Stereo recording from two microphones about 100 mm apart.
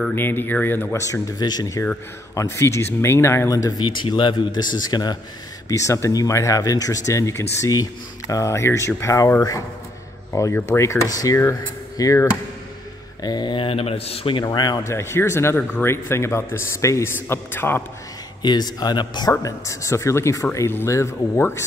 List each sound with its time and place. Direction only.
0.1 s speech: 20° left (ahead or behind)
1.0 s speech: 35° left (ahead or behind)
3.8 s speech: 50° left (ahead or behind)
5.7 s speech: 30° left (ahead or behind)
10.3 s speech: 25° left (ahead or behind)
13.2 s speech: 45° left (ahead or behind); by 14.3 s 80° left
14.3 s speech: 45° left (ahead or behind)
14.8 s speech: 30° left (ahead or behind)
18.4 s speech: 45° left (ahead or behind)
19.4 s speech: 30° left (ahead or behind)